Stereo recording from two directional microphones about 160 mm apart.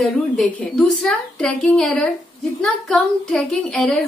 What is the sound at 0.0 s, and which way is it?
Speech, 5° left (ahead or behind).